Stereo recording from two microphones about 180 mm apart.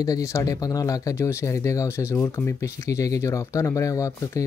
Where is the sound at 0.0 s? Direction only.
20° left (ahead or behind).